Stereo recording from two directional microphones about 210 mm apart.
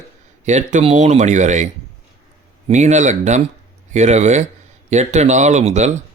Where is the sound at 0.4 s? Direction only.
35° right (ahead or behind).